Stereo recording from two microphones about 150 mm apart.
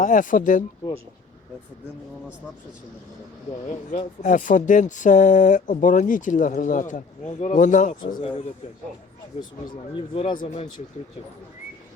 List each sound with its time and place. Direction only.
0.0 s speech: 60° left (ahead or behind)
3.7 s speech: 55° left (ahead or behind)
8.0 s speech: 35° left (ahead or behind)
9.6 s speech: 35° left (ahead or behind)